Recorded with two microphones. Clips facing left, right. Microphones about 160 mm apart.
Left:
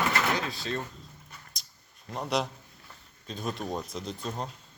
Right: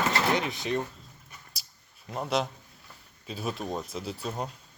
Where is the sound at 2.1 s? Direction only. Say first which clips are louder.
Right 1 dB; centre (ahead or behind).